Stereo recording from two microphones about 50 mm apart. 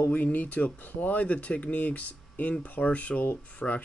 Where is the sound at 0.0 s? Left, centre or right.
Left.